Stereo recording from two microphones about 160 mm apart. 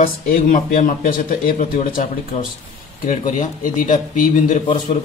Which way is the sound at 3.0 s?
55° left (ahead or behind).